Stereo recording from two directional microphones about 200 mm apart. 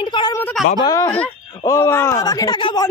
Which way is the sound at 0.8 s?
15° left (ahead or behind).